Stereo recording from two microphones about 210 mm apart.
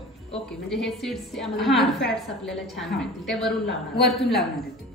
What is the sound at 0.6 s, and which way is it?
A woman's voice, centre (ahead or behind).